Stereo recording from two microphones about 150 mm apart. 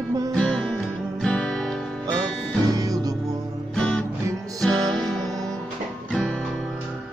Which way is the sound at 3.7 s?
5° left (ahead or behind).